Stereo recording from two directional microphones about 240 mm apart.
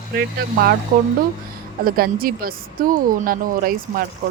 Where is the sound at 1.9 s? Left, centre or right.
Right.